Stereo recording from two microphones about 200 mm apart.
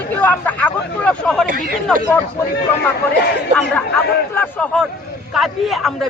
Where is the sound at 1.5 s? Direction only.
45° right (ahead or behind).